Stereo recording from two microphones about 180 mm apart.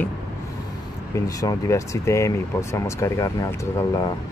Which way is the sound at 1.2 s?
20° left (ahead or behind).